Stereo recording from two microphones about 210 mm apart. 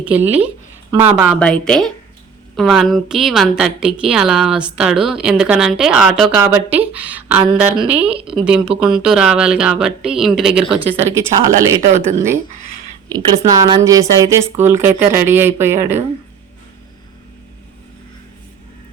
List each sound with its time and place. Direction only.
0.0 s speech: 10° right (ahead or behind)
1.4 s speech: 5° left (ahead or behind)
8.1 s speech: 25° right (ahead or behind)
8.4 s speech: 5° right (ahead or behind)
11.1 s speech: 15° right (ahead or behind)